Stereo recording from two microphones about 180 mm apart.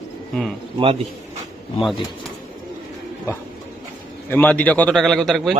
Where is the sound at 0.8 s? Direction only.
35° right (ahead or behind).